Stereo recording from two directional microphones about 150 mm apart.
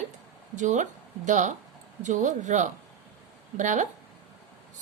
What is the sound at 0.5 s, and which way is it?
A woman's voice, 55° right (ahead or behind).